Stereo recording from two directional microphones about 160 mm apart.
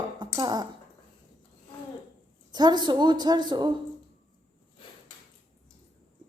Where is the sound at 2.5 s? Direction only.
25° right (ahead or behind).